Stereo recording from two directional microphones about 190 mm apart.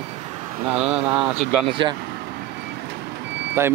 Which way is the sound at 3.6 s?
15° right (ahead or behind).